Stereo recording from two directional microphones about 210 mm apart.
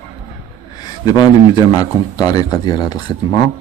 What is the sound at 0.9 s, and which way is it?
Speech, 20° left (ahead or behind).